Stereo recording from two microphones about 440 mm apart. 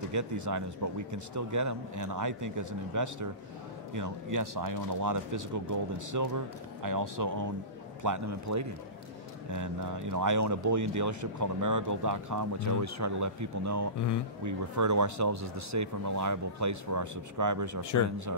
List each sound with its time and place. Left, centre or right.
0.1 s speech: right